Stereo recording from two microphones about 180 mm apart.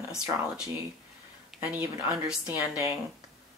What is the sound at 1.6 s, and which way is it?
Speech, 10° right (ahead or behind).